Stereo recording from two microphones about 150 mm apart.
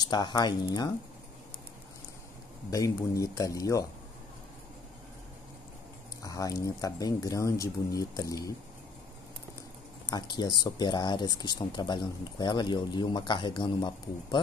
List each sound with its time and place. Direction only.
0.0 s speech: 30° left (ahead or behind)
2.7 s speech: 20° left (ahead or behind)
6.2 s speech: 20° left (ahead or behind)
10.0 s speech: 30° left (ahead or behind)